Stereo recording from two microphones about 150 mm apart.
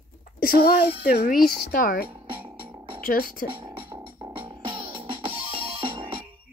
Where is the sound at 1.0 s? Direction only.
80° left.